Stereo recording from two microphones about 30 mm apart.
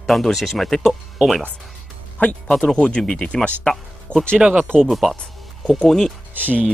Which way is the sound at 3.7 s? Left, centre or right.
Centre.